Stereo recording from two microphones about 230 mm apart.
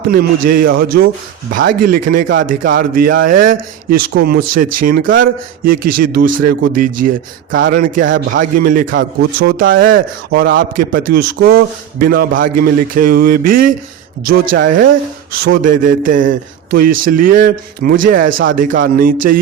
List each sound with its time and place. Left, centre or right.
0.1 s speech: right